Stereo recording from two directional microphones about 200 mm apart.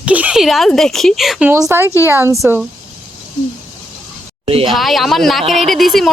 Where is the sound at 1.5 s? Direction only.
15° right (ahead or behind).